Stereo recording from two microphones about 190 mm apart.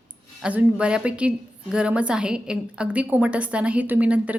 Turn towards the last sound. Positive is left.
turn(degrees=-5)  # may be behind; listen again after turning